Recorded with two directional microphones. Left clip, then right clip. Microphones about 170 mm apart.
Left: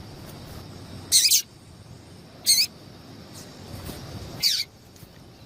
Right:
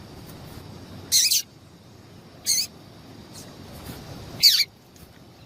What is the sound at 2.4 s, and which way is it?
Mouse, 10° left (ahead or behind).